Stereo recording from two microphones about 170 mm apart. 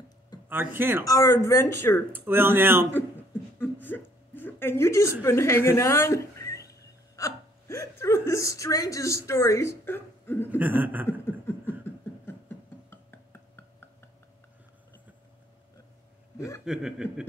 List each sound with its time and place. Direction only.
0.5 s speech: 10° right (ahead or behind)
1.0 s a woman's voice: 20° left (ahead or behind)
2.1 s speech: 10° right (ahead or behind)
3.5 s a sound: 10° left (ahead or behind)
10.6 s speech: 10° right (ahead or behind)
11.1 s a sound: 15° left (ahead or behind)
12.3 s music: 10° left (ahead or behind)
16.6 s speech: 5° right (ahead or behind)